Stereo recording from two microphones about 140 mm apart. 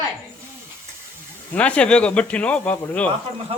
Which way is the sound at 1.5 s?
10° left (ahead or behind).